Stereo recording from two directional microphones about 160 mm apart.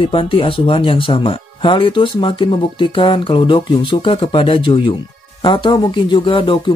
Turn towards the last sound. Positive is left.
turn(degrees=30)  # may be behind; listen again after turning